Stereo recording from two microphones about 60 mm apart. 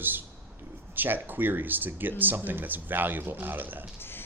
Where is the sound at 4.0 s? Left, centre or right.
Left.